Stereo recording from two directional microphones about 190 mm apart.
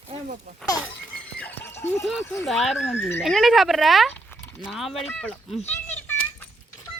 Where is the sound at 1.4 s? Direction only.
10° left (ahead or behind).